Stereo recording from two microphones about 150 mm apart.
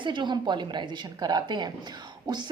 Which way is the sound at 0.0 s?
30° right (ahead or behind).